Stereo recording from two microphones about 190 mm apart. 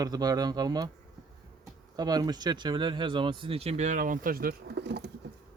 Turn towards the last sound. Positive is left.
turn(degrees=-65)  # may be behind; listen again after turning